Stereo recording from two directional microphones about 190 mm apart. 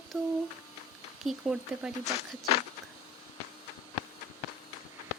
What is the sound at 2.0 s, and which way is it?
Speech, 35° left (ahead or behind).